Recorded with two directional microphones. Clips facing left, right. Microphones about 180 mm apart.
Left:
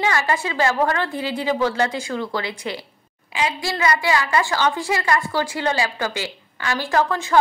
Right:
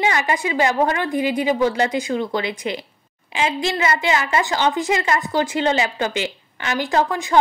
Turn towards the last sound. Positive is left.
turn(degrees=-15)  # may be behind; listen again after turning